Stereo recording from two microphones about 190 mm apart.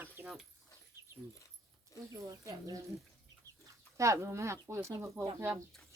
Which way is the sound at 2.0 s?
15° right (ahead or behind).